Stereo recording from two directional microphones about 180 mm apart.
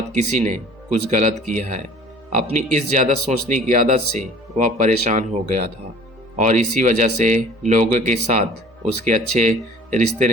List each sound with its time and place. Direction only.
0.1 s speech: 40° right (ahead or behind)